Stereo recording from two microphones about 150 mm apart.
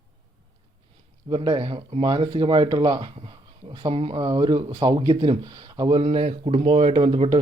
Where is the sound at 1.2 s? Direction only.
30° right (ahead or behind).